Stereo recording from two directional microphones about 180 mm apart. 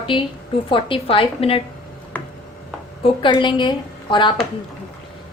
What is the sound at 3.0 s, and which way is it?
Speech, 25° left (ahead or behind).